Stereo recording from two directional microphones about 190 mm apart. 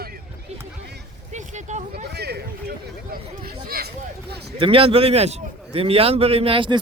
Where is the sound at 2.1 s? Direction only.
60° right (ahead or behind).